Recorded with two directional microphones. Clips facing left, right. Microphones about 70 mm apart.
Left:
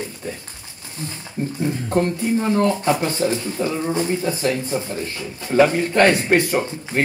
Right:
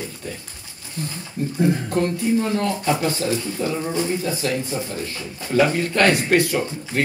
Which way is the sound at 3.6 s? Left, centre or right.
Left.